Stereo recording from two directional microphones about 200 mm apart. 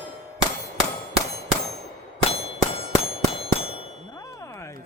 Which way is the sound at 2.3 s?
30° left (ahead or behind).